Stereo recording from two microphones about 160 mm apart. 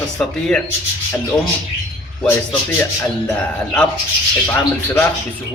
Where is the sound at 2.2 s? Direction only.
10° left (ahead or behind).